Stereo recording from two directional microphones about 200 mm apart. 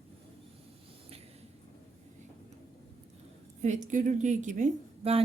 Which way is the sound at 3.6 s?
40° right (ahead or behind).